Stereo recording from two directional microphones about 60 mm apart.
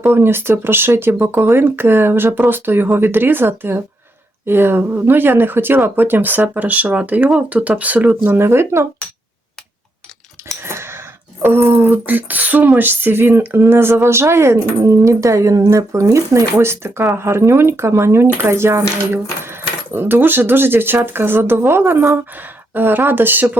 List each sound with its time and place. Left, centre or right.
0.0 s speech: right
10.6 s a sound: right
18.3 s speech: right